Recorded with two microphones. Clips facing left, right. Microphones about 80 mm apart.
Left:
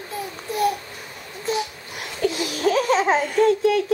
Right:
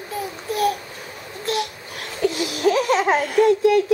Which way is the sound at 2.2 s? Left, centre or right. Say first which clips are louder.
Right 2 dB; centre.